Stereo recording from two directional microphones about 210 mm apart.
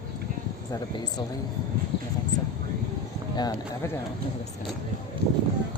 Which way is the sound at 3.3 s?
20° left (ahead or behind).